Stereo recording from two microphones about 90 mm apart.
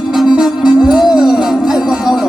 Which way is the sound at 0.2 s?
5° right (ahead or behind).